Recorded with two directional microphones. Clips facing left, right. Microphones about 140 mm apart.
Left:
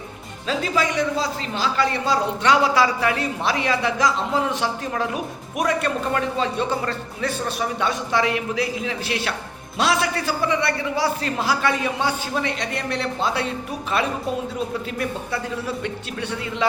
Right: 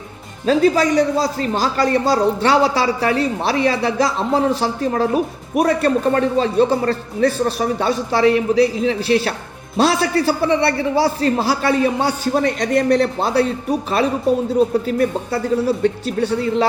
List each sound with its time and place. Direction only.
0.4 s a man's voice: 40° right (ahead or behind)